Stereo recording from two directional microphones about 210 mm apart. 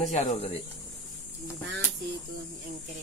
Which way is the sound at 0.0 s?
35° left (ahead or behind).